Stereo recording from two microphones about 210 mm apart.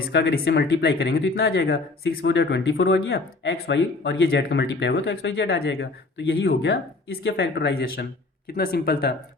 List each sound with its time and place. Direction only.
0.0 s speech: 50° left (ahead or behind)